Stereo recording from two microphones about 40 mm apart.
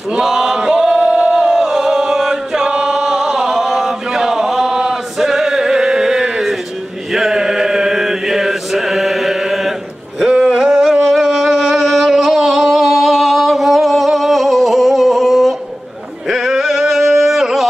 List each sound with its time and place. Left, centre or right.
0.1 s chant: centre
0.6 s male singing: centre
1.0 s a sound: right
1.3 s chant: centre
10.2 s a sound: centre
16.3 s male singing: centre